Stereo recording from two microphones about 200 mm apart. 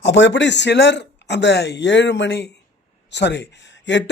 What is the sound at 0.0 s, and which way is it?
A man's voice, 60° left (ahead or behind).